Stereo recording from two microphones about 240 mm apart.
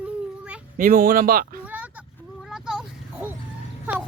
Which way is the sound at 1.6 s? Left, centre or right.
Centre.